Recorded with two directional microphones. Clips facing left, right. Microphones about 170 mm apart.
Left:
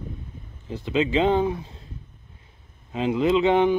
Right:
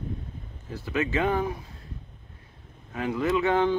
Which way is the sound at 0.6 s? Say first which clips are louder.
Left 5 dB; 20° left (ahead or behind).